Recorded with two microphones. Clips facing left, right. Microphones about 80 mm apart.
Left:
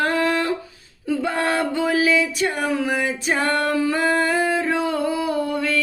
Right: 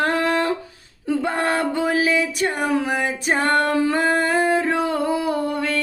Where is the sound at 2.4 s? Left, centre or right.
Right.